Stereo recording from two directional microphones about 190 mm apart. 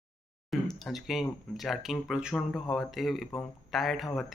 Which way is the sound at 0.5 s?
Centre (ahead or behind).